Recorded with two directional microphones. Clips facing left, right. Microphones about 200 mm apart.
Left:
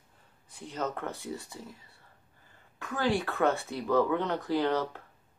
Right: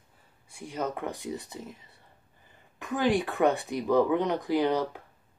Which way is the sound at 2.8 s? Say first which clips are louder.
Right 3 dB; 15° right (ahead or behind).